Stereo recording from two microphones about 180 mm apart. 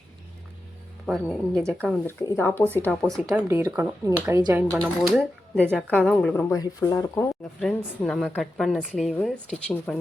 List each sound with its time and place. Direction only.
1.0 s a woman's voice: centre (ahead or behind)
3.3 s speech: 15° right (ahead or behind)
4.7 s a woman's voice: centre (ahead or behind); by 7.3 s 15° left (ahead or behind)
7.6 s a woman's voice: 5° left (ahead or behind)